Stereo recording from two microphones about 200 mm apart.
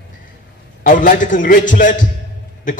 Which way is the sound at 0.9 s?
40° left (ahead or behind).